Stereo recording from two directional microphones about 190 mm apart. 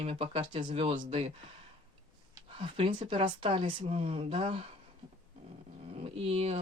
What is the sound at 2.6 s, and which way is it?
A woman's voice, 25° right (ahead or behind).